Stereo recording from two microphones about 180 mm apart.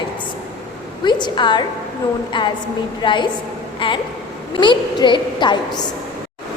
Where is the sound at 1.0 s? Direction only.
25° left (ahead or behind).